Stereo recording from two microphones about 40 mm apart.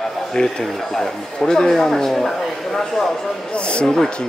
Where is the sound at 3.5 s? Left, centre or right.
Left.